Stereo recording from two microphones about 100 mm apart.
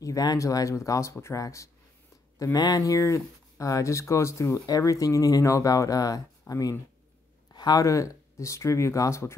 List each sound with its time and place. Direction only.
0.0 s speech: 40° left (ahead or behind)
7.5 s speech: 40° left (ahead or behind)